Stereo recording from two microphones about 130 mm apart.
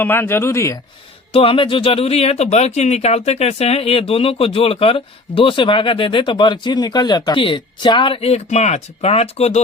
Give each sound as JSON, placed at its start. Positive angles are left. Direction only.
{"t": 0.0, "sound": "speech", "side_deg": 15}
{"t": 1.3, "sound": "speech", "side_deg": 45}